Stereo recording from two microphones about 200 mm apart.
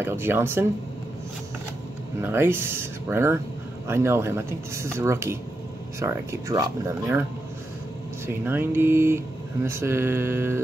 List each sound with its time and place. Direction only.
0.0 s speech: 10° right (ahead or behind)
2.2 s speech: 10° right (ahead or behind)
8.3 s speech: 10° right (ahead or behind)